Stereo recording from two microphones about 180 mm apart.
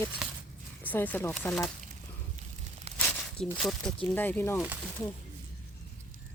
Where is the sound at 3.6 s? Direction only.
Centre (ahead or behind).